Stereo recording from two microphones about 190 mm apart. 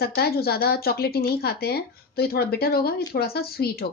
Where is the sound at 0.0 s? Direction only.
55° left (ahead or behind).